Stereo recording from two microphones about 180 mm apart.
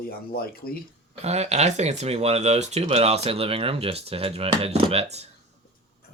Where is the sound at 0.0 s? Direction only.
55° left (ahead or behind).